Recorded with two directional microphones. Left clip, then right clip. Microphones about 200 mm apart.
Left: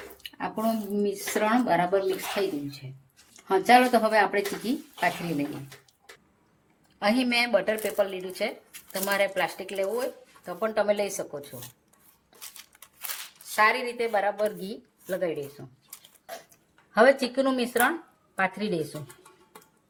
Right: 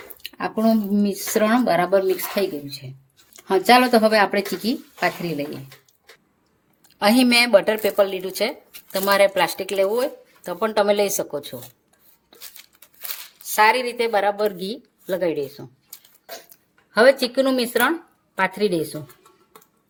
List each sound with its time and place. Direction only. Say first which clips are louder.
0.2 s speech: right 7 dB; 50° right (ahead or behind)
7.0 s speech: right 8 dB; 60° right (ahead or behind)
13.6 s speech: right 6 dB; 60° right (ahead or behind)
16.9 s speech: right 5 dB; 50° right (ahead or behind)